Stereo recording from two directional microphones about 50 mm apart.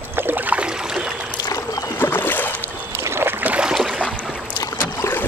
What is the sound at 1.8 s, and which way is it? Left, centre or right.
Boat, left.